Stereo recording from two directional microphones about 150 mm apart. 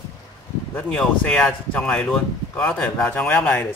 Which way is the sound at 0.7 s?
5° left (ahead or behind).